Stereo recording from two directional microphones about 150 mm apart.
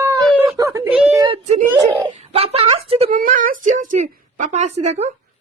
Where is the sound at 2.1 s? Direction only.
45° right (ahead or behind).